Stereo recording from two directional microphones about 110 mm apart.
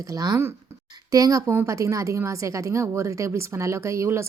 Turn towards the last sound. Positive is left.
turn(degrees=-25)  # may be behind; listen again after turning